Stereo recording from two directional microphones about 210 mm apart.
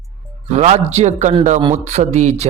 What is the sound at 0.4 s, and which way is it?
Speech, 30° right (ahead or behind).